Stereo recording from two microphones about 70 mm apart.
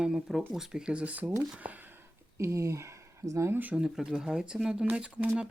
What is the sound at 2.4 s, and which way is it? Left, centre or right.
Speech, right.